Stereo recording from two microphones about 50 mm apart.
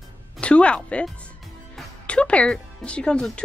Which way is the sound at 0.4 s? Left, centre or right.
Left.